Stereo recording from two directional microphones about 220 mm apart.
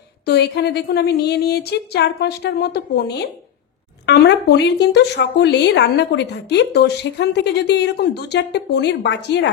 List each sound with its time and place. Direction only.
0.2 s speech: 50° left (ahead or behind)